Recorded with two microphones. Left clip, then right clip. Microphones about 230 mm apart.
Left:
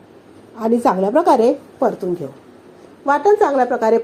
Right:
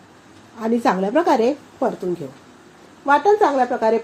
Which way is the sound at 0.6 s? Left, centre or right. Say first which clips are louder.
Left 3 dB; centre.